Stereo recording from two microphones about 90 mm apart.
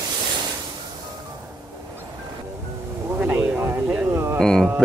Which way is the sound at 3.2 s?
20° right (ahead or behind).